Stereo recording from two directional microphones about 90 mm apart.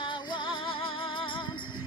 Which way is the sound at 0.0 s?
60° left (ahead or behind).